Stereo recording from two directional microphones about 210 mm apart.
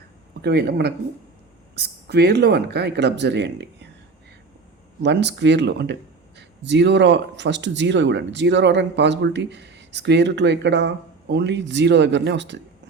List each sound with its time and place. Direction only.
0.4 s speech: 50° right (ahead or behind)
5.0 s speech: 55° right (ahead or behind)